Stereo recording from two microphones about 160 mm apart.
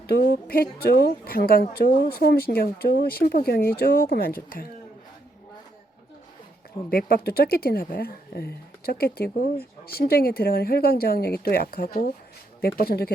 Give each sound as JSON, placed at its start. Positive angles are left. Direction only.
{"t": 0.1, "sound": "a woman's voice", "side_deg": 70}
{"t": 6.9, "sound": "a woman's voice", "side_deg": 70}